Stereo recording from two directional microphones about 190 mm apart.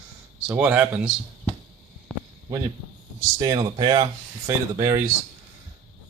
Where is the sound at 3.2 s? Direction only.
20° right (ahead or behind).